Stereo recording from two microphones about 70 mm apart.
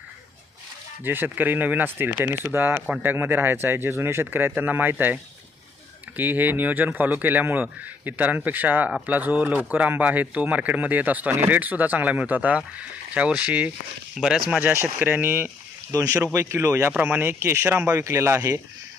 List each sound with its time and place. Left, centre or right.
1.0 s speech: right; by 14.6 s centre
14.6 s speech: right
15.9 s speech: right
17.0 s speech: right